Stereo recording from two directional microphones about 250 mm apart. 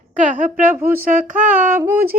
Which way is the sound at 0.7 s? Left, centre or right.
Centre.